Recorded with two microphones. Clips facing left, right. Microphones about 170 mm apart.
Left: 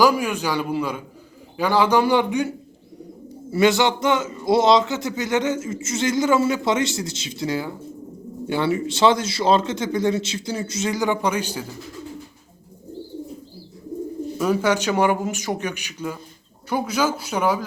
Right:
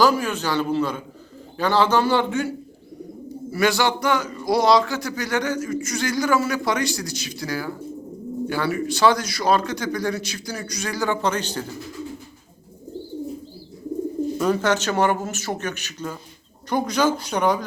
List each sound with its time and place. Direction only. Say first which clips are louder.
0.0 s speech: left 1 dB; 10° left (ahead or behind)
3.5 s a man's voice: left 3 dB; 20° left (ahead or behind)
14.3 s speech: left 2 dB; 10° left (ahead or behind)